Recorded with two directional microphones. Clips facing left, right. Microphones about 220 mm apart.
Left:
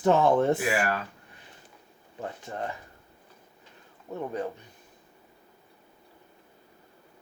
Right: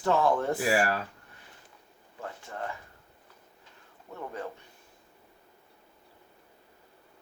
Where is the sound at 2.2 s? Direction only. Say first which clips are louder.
Left 3 dB; 20° left (ahead or behind).